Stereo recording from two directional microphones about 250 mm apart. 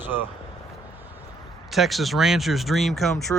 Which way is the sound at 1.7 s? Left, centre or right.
Centre.